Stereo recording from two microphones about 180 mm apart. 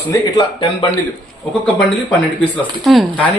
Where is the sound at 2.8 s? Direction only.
Centre (ahead or behind).